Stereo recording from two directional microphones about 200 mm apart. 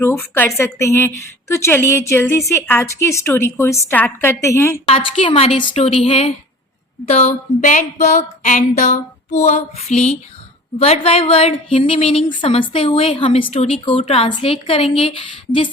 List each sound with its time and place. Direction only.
0.0 s a woman's voice: 10° left (ahead or behind)
4.9 s a woman's voice: 30° left (ahead or behind)